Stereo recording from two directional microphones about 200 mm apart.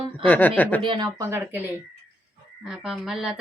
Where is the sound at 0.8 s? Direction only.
25° right (ahead or behind).